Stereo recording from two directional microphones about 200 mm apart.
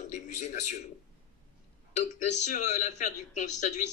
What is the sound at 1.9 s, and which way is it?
Speech, 35° left (ahead or behind).